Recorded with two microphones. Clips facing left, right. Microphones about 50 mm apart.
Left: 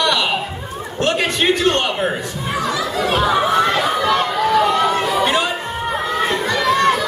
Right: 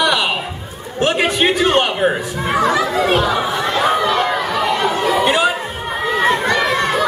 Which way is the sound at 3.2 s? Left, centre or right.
Centre.